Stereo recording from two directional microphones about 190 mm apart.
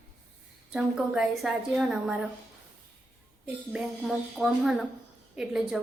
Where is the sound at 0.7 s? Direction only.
5° right (ahead or behind).